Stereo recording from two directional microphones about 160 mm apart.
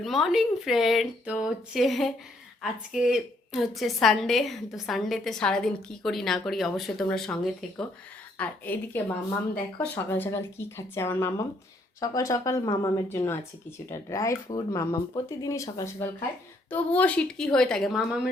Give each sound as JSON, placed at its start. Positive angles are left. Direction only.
{"t": 0.0, "sound": "a woman's voice", "side_deg": 0}